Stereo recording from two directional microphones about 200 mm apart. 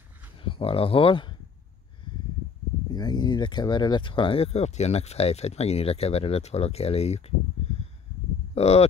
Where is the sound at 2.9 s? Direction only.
20° left (ahead or behind).